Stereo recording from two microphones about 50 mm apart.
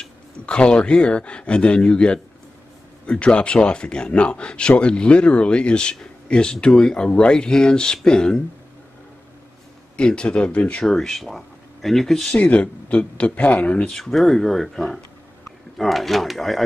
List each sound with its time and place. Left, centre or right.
0.0 s a man's voice: centre
9.9 s a man's voice: left
10.8 s speech: centre
12.3 s a man's voice: left
13.9 s speech: centre